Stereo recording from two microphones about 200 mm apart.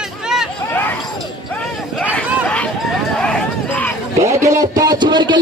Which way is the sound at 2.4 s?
5° left (ahead or behind).